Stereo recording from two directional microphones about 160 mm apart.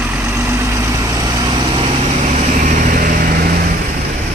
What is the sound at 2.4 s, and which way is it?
Vehicle, 50° right (ahead or behind).